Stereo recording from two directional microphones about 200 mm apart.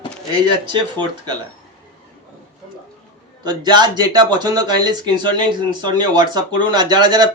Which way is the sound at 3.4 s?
20° right (ahead or behind).